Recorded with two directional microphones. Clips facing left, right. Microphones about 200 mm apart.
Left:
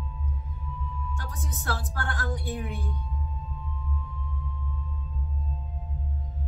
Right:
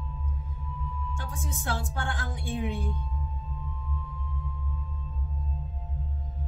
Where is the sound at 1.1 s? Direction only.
25° right (ahead or behind).